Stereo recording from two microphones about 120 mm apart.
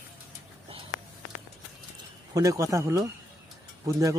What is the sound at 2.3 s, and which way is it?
A man's voice, 30° right (ahead or behind).